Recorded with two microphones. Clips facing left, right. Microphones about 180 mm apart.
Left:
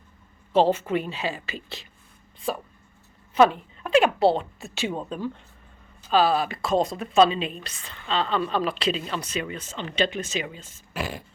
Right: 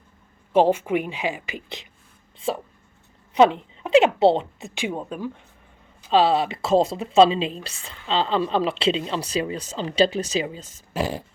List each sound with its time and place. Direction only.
0.5 s a woman's voice: 10° right (ahead or behind)
6.1 s speech: 25° right (ahead or behind)